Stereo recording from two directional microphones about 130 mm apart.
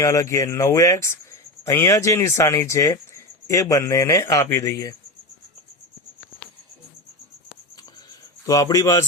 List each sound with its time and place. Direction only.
0.0 s speech: 25° left (ahead or behind)
7.8 s cricket: 30° left (ahead or behind)